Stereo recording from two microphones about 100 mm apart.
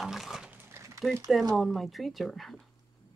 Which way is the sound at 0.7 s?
30° right (ahead or behind).